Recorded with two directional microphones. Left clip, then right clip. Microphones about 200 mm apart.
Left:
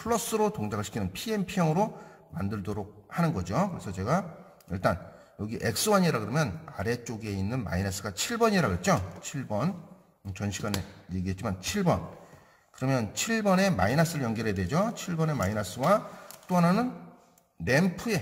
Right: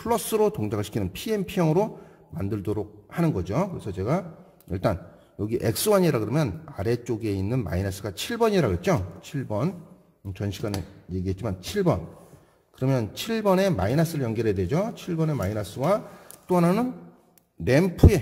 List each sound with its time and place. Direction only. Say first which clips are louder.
0.0 s a man's voice: right 4 dB; 35° right (ahead or behind)